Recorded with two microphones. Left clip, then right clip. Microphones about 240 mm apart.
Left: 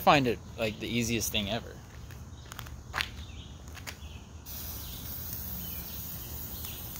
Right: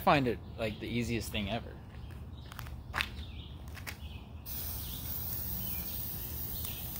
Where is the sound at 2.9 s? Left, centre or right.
Centre.